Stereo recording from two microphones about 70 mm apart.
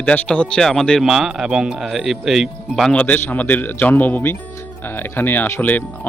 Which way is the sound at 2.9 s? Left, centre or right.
Left.